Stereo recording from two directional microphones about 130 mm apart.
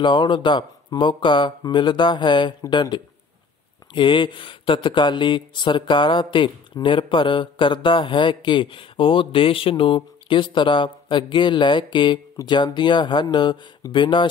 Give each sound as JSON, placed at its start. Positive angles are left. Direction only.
{"t": 0.0, "sound": "speech", "side_deg": 40}